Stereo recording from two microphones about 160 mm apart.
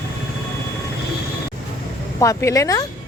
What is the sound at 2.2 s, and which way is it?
Speech, 20° left (ahead or behind).